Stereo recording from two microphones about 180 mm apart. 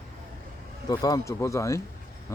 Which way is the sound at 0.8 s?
20° left (ahead or behind).